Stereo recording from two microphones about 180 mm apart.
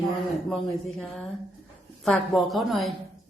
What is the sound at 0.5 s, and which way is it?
Speech, centre (ahead or behind).